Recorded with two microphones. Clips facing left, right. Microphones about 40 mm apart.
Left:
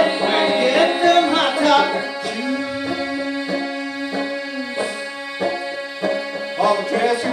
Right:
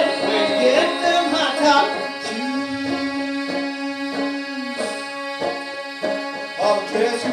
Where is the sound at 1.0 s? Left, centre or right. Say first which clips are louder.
Left 3 dB; left.